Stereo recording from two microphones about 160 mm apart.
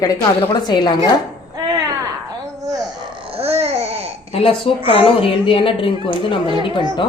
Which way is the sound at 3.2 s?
40° right (ahead or behind).